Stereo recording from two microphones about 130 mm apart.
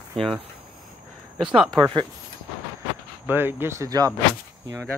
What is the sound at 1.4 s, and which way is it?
Speech, centre (ahead or behind).